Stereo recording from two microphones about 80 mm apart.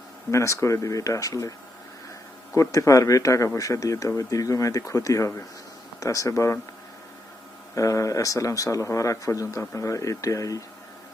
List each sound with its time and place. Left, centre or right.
0.3 s speech: left
2.6 s speech: left
7.8 s speech: left